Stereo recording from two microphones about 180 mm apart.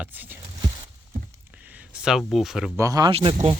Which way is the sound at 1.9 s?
5° right (ahead or behind).